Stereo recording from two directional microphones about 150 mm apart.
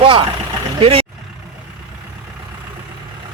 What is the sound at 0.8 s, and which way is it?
Speech, 40° right (ahead or behind).